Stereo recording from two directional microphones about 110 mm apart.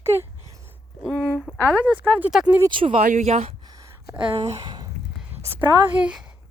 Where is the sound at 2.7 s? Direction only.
50° right (ahead or behind).